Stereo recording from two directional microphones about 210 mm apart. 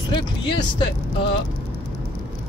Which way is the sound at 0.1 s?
20° left (ahead or behind).